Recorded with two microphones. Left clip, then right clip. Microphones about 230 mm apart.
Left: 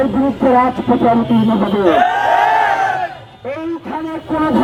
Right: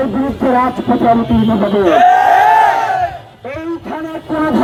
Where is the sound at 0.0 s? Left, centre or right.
Right.